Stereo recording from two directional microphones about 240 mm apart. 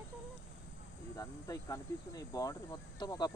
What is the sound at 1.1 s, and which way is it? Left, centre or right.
Speech, centre.